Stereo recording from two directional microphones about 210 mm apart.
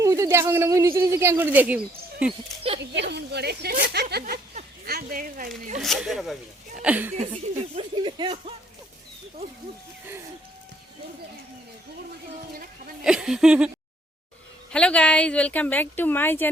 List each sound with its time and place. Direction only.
0.0 s speech: 15° right (ahead or behind)
2.9 s a woman's voice: 55° right (ahead or behind)
5.8 s speech: centre (ahead or behind)
7.8 s speech: 25° right (ahead or behind)
13.1 s speech: 5° right (ahead or behind)
14.7 s speech: 5° left (ahead or behind)